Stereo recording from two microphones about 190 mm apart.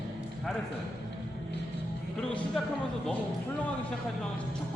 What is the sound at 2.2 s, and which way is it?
Music, 5° left (ahead or behind).